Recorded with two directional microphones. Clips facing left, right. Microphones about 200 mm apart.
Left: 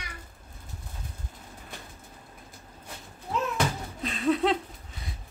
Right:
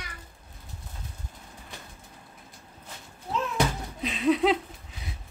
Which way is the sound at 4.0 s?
5° right (ahead or behind).